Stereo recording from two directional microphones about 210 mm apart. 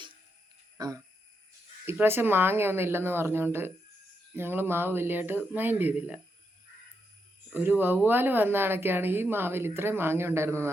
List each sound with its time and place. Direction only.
0.8 s a sound: 15° right (ahead or behind)
1.8 s speech: 10° right (ahead or behind)
7.5 s speech: 10° right (ahead or behind)